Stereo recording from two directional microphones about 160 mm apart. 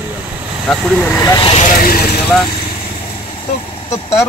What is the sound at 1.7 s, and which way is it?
Speech, 65° left (ahead or behind).